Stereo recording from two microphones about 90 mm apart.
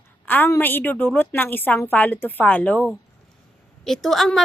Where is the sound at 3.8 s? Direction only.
5° left (ahead or behind).